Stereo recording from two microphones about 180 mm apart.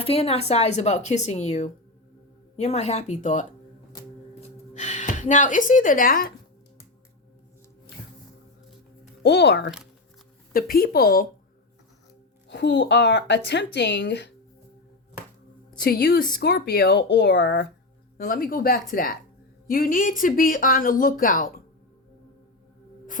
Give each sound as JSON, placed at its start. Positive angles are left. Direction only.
{"t": 0.0, "sound": "speech", "side_deg": 35}
{"t": 4.4, "sound": "a sound", "side_deg": 40}
{"t": 9.2, "sound": "speech", "side_deg": 70}
{"t": 10.5, "sound": "speech", "side_deg": 55}
{"t": 12.5, "sound": "speech", "side_deg": 75}
{"t": 15.8, "sound": "speech", "side_deg": 60}
{"t": 18.2, "sound": "speech", "side_deg": 50}